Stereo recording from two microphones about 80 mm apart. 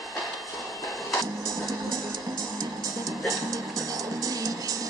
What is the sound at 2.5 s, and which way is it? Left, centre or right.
Music, right.